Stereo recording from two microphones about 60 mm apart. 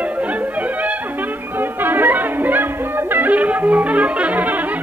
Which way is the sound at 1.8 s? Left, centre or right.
Right.